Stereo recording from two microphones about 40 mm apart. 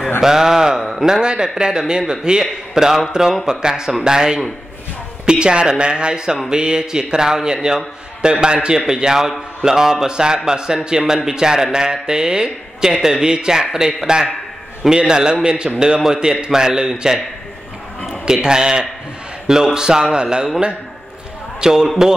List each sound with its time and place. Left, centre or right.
0.2 s a man's voice: centre
18.2 s a man's voice: centre